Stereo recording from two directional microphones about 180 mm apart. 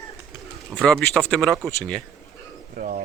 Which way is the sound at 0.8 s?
5° left (ahead or behind).